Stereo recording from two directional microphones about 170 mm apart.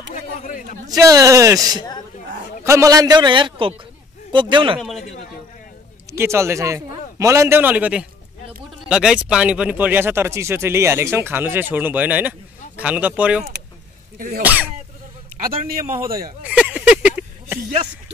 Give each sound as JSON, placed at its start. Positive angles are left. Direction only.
{"t": 0.1, "sound": "a sound", "side_deg": 50}
{"t": 0.8, "sound": "a man's voice", "side_deg": -20}
{"t": 4.7, "sound": "a man's voice", "side_deg": 0}
{"t": 6.1, "sound": "speech", "side_deg": -15}
{"t": 14.1, "sound": "speech", "side_deg": -55}
{"t": 14.4, "sound": "speech", "side_deg": -10}
{"t": 16.4, "sound": "a sound", "side_deg": -10}